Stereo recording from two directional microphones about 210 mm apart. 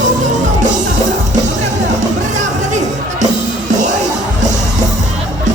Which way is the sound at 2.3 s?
35° right (ahead or behind).